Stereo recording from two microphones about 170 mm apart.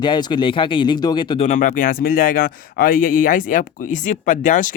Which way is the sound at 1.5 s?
50° left (ahead or behind).